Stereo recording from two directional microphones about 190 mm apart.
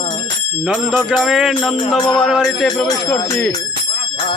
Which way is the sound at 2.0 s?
25° left (ahead or behind).